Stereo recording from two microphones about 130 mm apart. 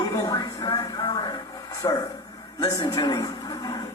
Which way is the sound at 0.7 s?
35° left (ahead or behind).